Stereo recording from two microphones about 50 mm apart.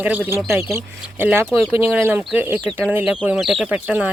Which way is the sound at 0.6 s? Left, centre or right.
Right.